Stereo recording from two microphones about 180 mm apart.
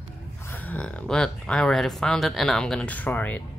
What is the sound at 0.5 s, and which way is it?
Speech, 10° left (ahead or behind).